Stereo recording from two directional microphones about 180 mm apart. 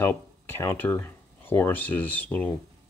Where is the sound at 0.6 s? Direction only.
10° left (ahead or behind).